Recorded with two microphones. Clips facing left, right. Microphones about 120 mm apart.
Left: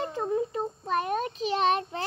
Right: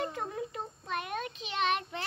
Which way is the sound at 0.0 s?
30° left (ahead or behind).